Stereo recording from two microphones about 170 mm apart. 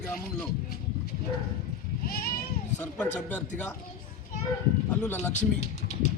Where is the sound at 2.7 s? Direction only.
10° left (ahead or behind).